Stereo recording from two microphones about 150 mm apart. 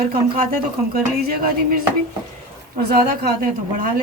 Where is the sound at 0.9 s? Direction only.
85° right.